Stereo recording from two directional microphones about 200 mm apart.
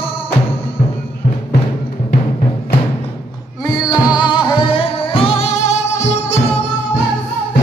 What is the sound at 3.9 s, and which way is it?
Music, 20° left (ahead or behind).